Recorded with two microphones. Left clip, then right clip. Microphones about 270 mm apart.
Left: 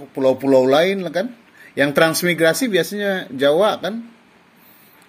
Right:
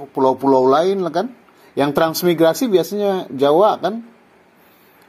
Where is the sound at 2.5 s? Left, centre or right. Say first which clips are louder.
Right 2 dB; centre.